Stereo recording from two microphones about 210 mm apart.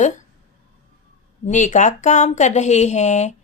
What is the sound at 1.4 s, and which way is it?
Speech, 35° left (ahead or behind).